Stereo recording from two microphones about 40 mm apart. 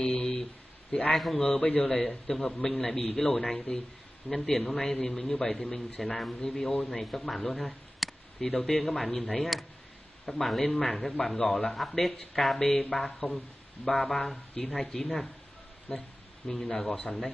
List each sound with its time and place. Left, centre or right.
0.0 s a sound: centre
1.1 s a man's voice: centre
1.4 s a man's voice: centre